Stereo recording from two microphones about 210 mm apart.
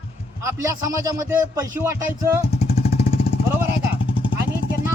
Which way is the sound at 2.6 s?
30° left (ahead or behind).